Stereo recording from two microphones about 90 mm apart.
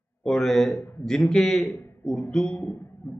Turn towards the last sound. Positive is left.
turn(degrees=20)  # may be behind; listen again after turning